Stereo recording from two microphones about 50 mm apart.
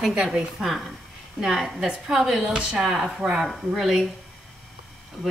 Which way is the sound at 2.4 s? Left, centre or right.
Right.